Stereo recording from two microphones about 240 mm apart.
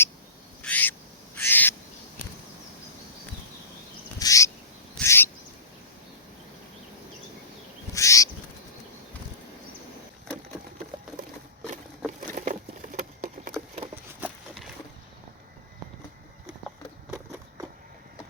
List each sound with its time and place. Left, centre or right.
0.6 s owl: centre
1.4 s bird: centre
4.2 s bird: centre
4.9 s cat: centre
7.9 s a sound: centre
12.3 s patter: right
13.9 s a sound: centre